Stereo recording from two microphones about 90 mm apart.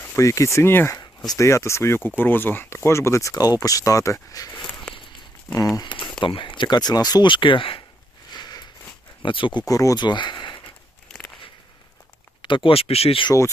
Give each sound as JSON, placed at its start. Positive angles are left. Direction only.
{"t": 0.2, "sound": "speech", "side_deg": 35}
{"t": 5.7, "sound": "speech", "side_deg": 55}
{"t": 7.3, "sound": "speech", "side_deg": 65}
{"t": 8.3, "sound": "a sound", "side_deg": 50}
{"t": 9.2, "sound": "speech", "side_deg": 70}
{"t": 9.6, "sound": "speech", "side_deg": 40}
{"t": 10.0, "sound": "speech", "side_deg": 55}
{"t": 12.4, "sound": "speech", "side_deg": 65}